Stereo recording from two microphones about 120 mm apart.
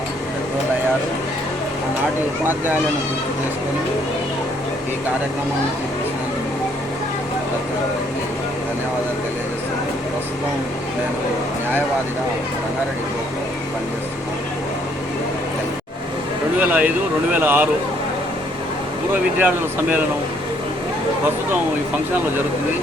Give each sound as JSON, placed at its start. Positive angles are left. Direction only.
{"t": 16.6, "sound": "speech", "side_deg": -15}
{"t": 19.4, "sound": "speech", "side_deg": -15}